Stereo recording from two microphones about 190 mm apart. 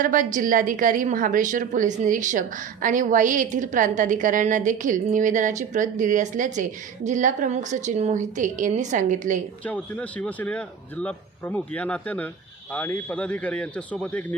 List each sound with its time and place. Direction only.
0.0 s a woman's voice: 45° right (ahead or behind)
9.6 s a man's voice: 5° left (ahead or behind)